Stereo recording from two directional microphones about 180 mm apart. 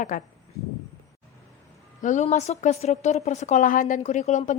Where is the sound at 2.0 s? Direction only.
45° left (ahead or behind).